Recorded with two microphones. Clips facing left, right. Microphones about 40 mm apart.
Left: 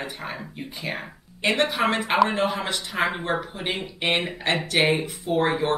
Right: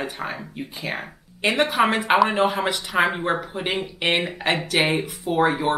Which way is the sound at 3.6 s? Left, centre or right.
Centre.